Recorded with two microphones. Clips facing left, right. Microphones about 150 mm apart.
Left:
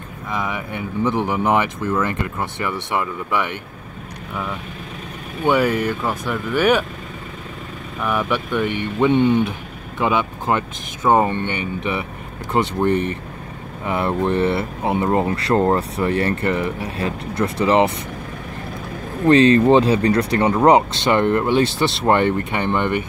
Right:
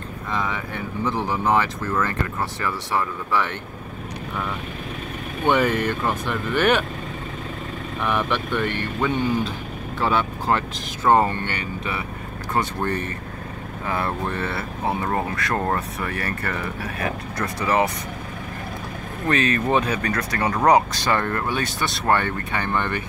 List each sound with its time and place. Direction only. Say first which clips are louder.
0.3 s speech: left 2 dB; 15° left (ahead or behind)
5.4 s speech: left 2 dB; 5° left (ahead or behind)
8.0 s speech: left 2 dB; 5° left (ahead or behind)
9.1 s speech: left 7 dB; 25° left (ahead or behind)
19.2 s speech: left 10 dB; 30° left (ahead or behind)